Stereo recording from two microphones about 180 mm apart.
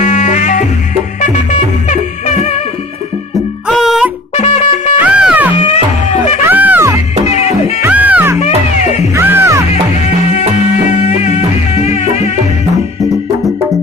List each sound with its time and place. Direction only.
0.0 s music: 40° left (ahead or behind)
3.7 s music: centre (ahead or behind)
4.4 s music: 35° left (ahead or behind)
5.0 s music: 10° right (ahead or behind)
8.4 s music: 35° left (ahead or behind)
9.1 s music: 10° right (ahead or behind)
11.0 s music: 35° left (ahead or behind)